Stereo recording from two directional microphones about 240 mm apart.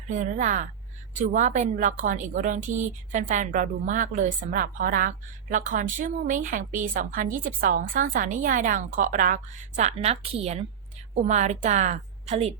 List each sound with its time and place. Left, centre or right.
0.1 s a woman's voice: right